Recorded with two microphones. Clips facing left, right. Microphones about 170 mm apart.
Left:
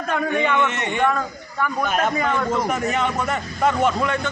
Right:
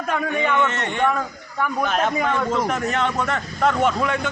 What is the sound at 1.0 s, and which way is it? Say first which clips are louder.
Speech: even; 5° right (ahead or behind).